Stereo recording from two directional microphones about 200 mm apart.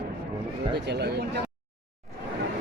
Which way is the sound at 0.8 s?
55° right (ahead or behind).